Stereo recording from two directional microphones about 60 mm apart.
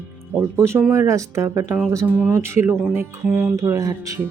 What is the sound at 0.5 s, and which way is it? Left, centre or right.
Speech, right.